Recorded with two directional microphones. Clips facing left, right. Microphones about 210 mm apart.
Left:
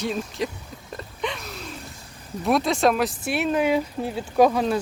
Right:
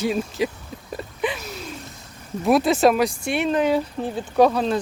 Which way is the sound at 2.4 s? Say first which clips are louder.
Right 4 dB; centre (ahead or behind).